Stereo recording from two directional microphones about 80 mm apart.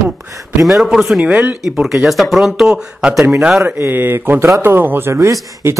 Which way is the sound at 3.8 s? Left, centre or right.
Right.